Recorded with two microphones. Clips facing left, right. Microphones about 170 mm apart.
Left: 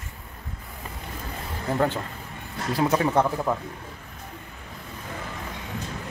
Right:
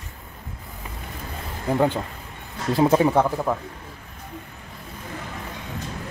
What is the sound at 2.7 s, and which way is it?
Speech, 25° right (ahead or behind).